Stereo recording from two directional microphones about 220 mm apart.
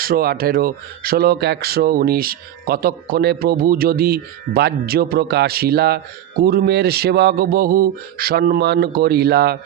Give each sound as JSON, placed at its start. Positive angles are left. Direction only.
{"t": 0.0, "sound": "speech", "side_deg": -40}